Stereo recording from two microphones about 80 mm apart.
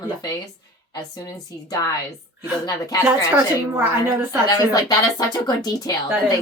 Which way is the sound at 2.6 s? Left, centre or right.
Left.